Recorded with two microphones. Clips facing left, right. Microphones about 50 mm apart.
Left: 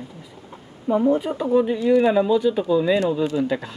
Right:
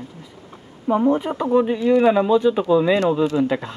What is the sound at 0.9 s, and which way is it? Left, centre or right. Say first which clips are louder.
Speech: right 1 dB; right.